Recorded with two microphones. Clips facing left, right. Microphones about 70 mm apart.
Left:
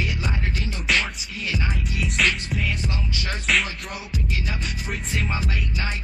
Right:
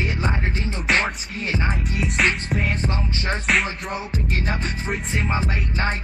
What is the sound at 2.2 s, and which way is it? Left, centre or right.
Music, right.